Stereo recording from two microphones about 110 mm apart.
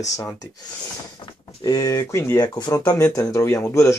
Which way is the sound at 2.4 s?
35° left (ahead or behind).